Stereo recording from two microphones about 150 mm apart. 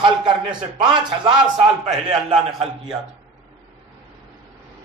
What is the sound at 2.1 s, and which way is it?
Speech, 40° right (ahead or behind).